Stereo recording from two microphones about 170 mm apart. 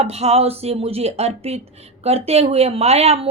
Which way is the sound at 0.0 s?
40° right (ahead or behind).